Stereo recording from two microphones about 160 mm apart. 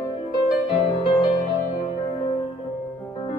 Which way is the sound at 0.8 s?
30° left (ahead or behind).